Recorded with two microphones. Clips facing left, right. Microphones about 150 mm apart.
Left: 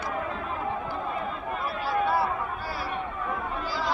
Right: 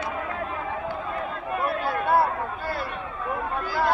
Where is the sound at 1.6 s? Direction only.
55° right (ahead or behind).